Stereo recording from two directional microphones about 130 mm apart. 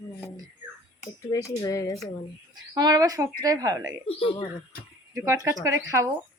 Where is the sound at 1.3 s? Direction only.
25° left (ahead or behind).